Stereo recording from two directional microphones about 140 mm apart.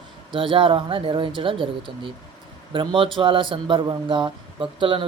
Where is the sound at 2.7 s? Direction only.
40° right (ahead or behind).